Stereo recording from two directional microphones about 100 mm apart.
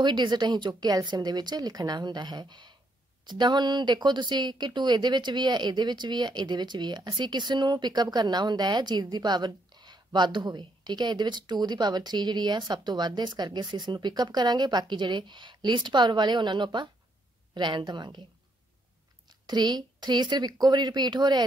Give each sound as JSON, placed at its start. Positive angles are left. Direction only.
{"t": 0.0, "sound": "speech", "side_deg": -50}
{"t": 19.2, "sound": "speech", "side_deg": -45}